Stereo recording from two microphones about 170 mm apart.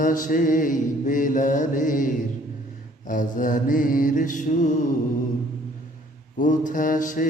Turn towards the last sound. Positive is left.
turn(degrees=50)  # may be behind; listen again after turning